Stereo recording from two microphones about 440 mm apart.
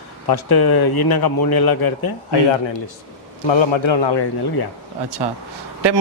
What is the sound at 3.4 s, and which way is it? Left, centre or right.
Speech, left.